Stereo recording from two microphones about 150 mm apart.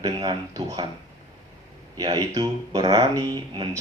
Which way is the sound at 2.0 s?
30° right (ahead or behind).